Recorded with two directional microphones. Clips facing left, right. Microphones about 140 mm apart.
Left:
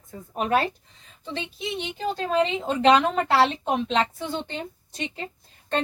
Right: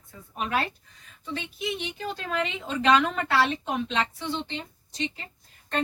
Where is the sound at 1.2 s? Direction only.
30° left (ahead or behind); by 4.6 s 45° left (ahead or behind).